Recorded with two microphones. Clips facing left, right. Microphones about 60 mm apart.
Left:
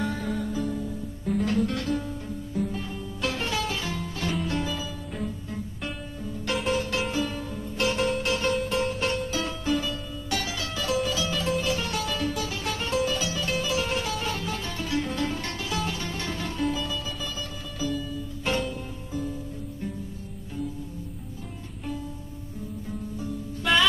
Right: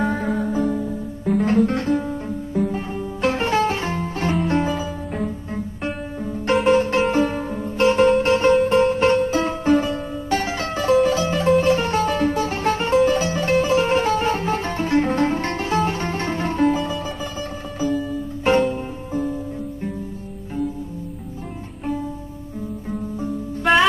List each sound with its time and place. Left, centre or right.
0.0 s music: right
6.2 s music: right
22.8 s music: right